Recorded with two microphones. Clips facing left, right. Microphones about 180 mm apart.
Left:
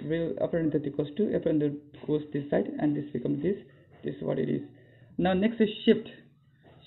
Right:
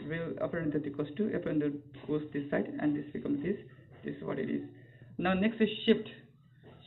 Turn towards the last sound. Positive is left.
turn(degrees=35)  # may be behind; listen again after turning